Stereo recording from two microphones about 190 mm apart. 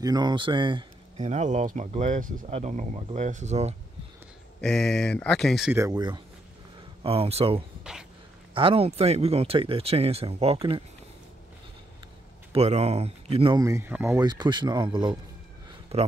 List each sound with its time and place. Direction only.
0.0 s speech: 20° right (ahead or behind)
1.2 s speech: 40° right (ahead or behind)
4.6 s speech: 5° left (ahead or behind)
5.7 s speech: 15° right (ahead or behind)
12.5 s speech: 35° right (ahead or behind)
13.6 s speech: 15° right (ahead or behind); by 16.1 s 30° right (ahead or behind)